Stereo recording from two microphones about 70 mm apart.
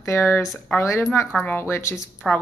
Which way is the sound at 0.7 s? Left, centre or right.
Left.